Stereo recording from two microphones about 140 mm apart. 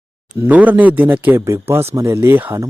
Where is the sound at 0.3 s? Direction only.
10° right (ahead or behind).